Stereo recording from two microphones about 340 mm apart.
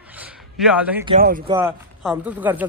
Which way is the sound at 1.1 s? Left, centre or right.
Right.